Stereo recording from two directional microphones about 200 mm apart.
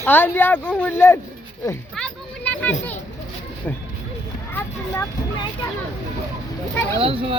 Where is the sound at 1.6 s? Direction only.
10° left (ahead or behind).